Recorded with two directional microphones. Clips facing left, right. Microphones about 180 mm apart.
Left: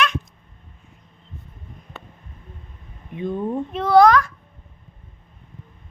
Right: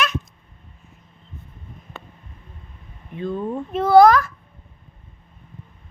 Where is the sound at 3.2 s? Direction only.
15° left (ahead or behind).